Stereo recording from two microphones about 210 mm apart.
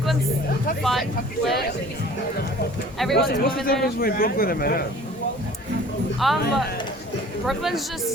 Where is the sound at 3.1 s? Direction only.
50° left (ahead or behind).